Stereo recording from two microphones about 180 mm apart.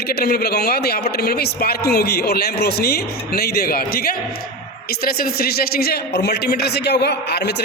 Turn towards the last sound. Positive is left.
turn(degrees=65)  # may be behind; listen again after turning